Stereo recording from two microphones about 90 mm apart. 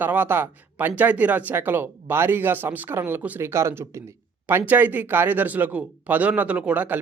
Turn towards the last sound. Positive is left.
turn(degrees=-20)  # may be behind; listen again after turning